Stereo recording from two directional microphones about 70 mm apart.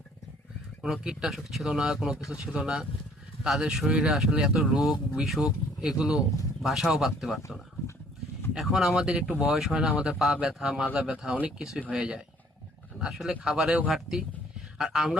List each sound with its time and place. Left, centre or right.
1.0 s speech: centre
8.5 s speech: centre